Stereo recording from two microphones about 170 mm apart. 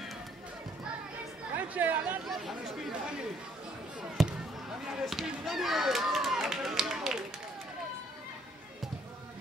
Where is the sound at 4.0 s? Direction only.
5° right (ahead or behind).